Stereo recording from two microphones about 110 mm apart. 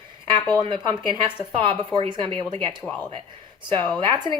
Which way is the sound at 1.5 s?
55° right (ahead or behind).